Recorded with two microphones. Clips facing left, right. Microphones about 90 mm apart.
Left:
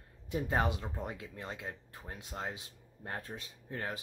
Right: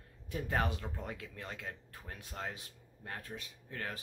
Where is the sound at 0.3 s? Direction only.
20° left (ahead or behind).